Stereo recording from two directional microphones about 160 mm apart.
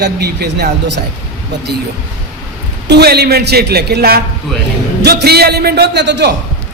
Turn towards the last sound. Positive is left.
turn(degrees=-90)